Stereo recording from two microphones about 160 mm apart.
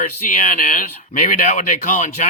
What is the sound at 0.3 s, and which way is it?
Speech, 60° left (ahead or behind).